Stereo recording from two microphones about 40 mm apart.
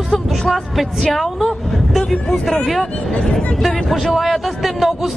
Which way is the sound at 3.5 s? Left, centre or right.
Centre.